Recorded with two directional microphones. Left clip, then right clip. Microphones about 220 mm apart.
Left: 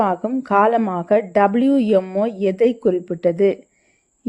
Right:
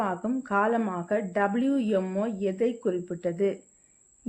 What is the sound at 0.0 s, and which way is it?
Speech, 35° left (ahead or behind).